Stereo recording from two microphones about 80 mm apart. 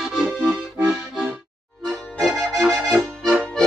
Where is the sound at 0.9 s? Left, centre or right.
Centre.